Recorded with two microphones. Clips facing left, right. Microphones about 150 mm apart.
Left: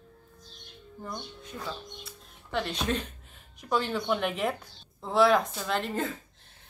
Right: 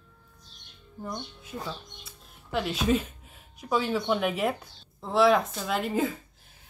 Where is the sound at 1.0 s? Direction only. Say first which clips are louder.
Right 3 dB; 5° right (ahead or behind).